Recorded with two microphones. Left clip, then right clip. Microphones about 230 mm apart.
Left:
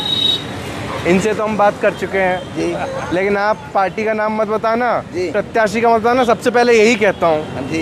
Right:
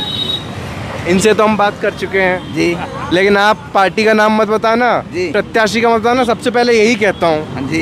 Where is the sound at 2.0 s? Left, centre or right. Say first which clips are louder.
Right 3 dB; centre.